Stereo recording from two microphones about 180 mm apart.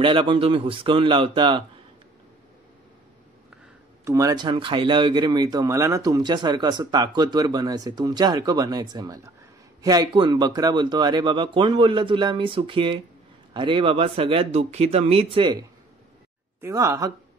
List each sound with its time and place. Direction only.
0.0 s speech: 30° right (ahead or behind)
4.0 s speech: 15° right (ahead or behind)
16.6 s a woman's voice: 15° right (ahead or behind)